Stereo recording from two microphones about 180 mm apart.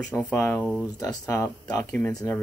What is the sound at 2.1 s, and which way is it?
Speech, 20° left (ahead or behind).